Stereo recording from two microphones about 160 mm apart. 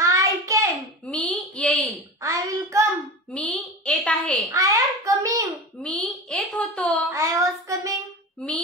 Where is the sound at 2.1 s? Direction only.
20° right (ahead or behind).